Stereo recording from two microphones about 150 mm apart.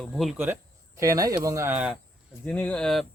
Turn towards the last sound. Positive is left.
turn(degrees=5)  # may be behind; listen again after turning